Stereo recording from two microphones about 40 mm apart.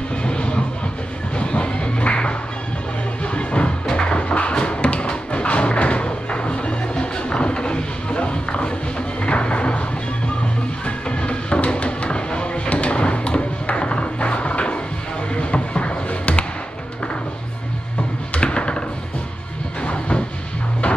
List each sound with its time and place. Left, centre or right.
0.1 s music: left
3.3 s music: left
10.9 s music: left
18.3 s a sound: left
19.8 s vehicle: left